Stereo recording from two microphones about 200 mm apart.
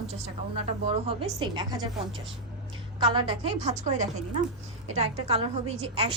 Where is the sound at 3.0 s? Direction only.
20° right (ahead or behind).